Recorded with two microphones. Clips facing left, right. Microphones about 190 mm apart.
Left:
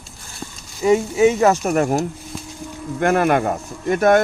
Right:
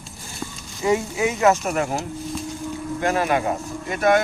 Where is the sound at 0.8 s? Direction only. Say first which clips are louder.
Left 6 dB; 25° left (ahead or behind); by 2.0 s 45° left (ahead or behind).